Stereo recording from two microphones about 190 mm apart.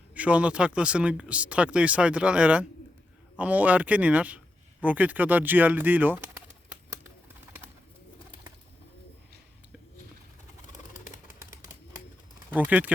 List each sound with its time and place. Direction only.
0.1 s speech: 5° right (ahead or behind)
10.7 s bird: 40° left (ahead or behind)
12.5 s speech: 10° right (ahead or behind)